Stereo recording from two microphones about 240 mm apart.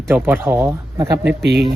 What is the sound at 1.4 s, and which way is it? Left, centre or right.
Speech, right.